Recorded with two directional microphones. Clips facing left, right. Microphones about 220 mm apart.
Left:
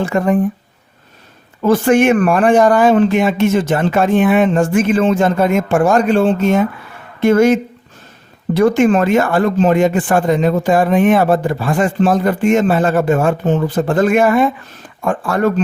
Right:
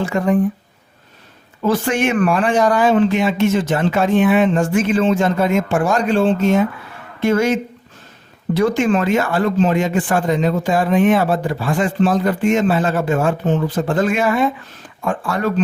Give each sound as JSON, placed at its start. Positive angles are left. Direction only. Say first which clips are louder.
{"t": 0.0, "sound": "speech", "louder": "left 2 dB", "side_deg": 50}
{"t": 1.6, "sound": "speech", "louder": "left 6 dB", "side_deg": 50}